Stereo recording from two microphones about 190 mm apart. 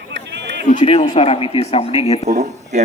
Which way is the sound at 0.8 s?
30° left (ahead or behind).